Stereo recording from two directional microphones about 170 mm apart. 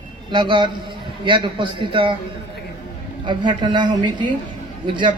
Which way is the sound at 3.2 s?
25° right (ahead or behind).